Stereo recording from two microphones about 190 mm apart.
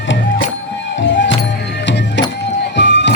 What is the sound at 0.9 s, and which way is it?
Music, 70° left (ahead or behind).